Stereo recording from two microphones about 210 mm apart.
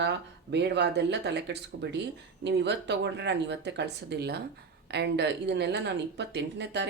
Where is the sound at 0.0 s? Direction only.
55° right (ahead or behind).